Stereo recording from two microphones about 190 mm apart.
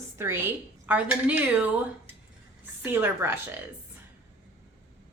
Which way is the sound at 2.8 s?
10° right (ahead or behind).